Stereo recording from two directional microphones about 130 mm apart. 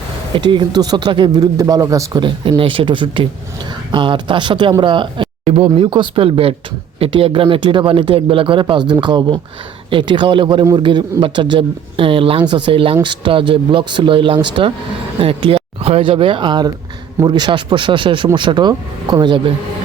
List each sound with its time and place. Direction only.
0.3 s a man's voice: 35° right (ahead or behind)
2.2 s a man's voice: 40° right (ahead or behind)
5.5 s a man's voice: 50° right (ahead or behind); by 19.4 s 30° right (ahead or behind)